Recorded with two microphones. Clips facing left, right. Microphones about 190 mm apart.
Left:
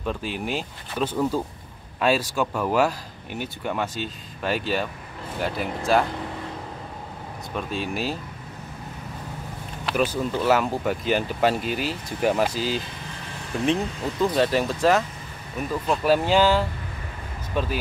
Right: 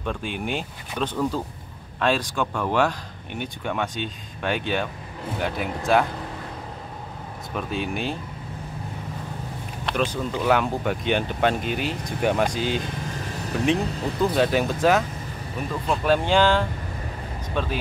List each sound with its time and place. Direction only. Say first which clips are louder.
0.0 s speech: even; 5° left (ahead or behind)
7.5 s speech: right 1 dB; centre (ahead or behind)
9.8 s speech: left 2 dB; 5° left (ahead or behind)